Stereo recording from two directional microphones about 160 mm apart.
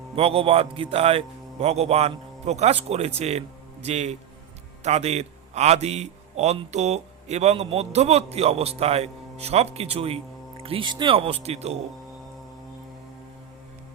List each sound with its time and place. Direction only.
0.2 s a man's voice: 40° right (ahead or behind)